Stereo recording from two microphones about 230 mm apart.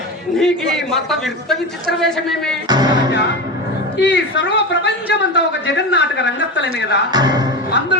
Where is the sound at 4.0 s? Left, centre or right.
Left.